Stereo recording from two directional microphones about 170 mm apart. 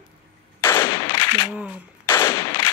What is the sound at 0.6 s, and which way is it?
Machine gun, 15° left (ahead or behind).